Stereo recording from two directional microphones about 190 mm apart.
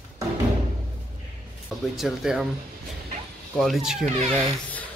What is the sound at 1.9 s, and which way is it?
Speech, centre (ahead or behind).